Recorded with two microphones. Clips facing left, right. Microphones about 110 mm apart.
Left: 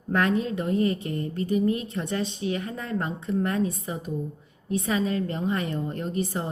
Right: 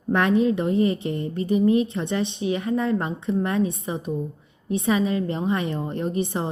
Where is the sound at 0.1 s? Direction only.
20° right (ahead or behind).